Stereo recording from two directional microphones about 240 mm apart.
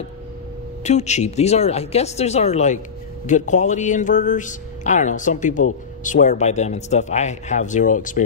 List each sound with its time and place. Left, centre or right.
0.8 s a man's voice: left